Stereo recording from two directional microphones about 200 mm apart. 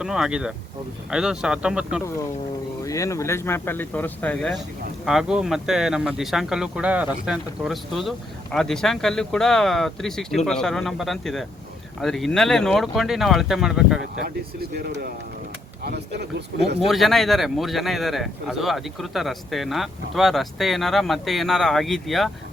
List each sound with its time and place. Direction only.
0.0 s a man's voice: 5° right (ahead or behind)
2.8 s a man's voice: 15° left (ahead or behind); by 14.0 s 5° right (ahead or behind)
14.6 s speech: 50° right (ahead or behind)
16.8 s a man's voice: centre (ahead or behind)